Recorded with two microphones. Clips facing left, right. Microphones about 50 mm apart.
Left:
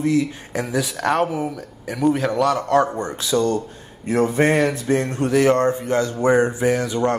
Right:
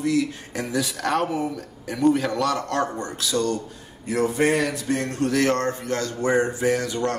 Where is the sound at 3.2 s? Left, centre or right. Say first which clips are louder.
Left 4 dB; left.